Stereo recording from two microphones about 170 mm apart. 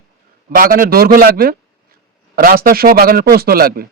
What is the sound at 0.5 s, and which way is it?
A man's voice, 55° right (ahead or behind).